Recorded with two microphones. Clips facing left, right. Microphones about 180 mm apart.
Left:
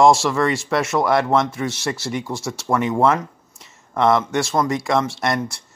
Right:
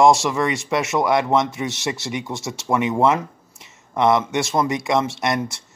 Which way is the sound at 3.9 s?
20° right (ahead or behind).